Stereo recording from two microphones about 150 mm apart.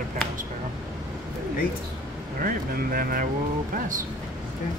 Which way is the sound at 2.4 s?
70° right (ahead or behind).